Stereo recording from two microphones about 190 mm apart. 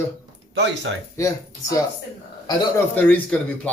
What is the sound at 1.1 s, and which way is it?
Speech, 15° left (ahead or behind).